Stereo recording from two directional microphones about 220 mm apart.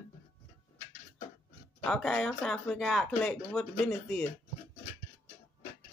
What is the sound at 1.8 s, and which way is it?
Speech, 5° left (ahead or behind).